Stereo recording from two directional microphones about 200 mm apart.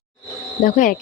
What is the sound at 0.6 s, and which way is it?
Speech, 45° left (ahead or behind).